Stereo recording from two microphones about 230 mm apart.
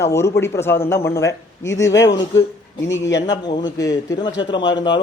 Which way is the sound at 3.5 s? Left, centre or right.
Centre.